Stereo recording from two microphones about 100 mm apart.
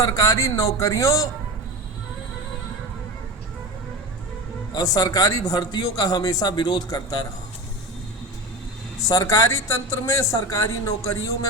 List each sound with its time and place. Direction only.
0.0 s a man's voice: 35° left (ahead or behind)
4.7 s a man's voice: 40° left (ahead or behind)
9.0 s a man's voice: 35° left (ahead or behind)